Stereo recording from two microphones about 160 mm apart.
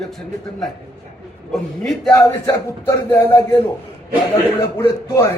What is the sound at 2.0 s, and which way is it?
Speech, 20° left (ahead or behind).